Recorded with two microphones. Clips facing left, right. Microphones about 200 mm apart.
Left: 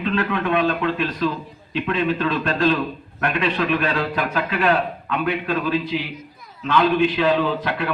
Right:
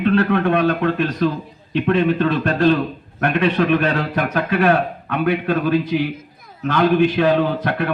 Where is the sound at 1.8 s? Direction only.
60° right (ahead or behind).